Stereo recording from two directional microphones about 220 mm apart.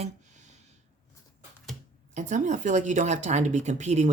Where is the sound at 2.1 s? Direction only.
35° right (ahead or behind).